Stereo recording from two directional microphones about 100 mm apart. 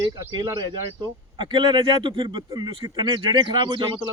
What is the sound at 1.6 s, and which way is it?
Speech, 50° right (ahead or behind).